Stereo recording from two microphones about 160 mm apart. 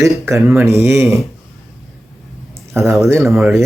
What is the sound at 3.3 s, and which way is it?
Speech, centre (ahead or behind).